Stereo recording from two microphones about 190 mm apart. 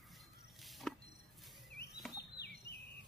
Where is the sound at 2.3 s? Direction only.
60° left (ahead or behind).